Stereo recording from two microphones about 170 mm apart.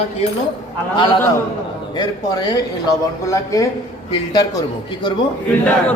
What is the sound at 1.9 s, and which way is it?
Speech, 25° left (ahead or behind).